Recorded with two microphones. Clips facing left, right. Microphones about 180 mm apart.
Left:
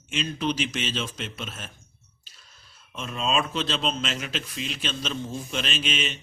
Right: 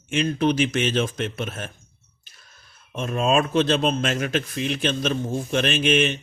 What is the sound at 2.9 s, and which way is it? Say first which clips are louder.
Speech: right 6 dB; 50° right (ahead or behind).